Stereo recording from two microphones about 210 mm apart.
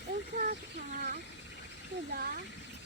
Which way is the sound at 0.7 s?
45° right (ahead or behind).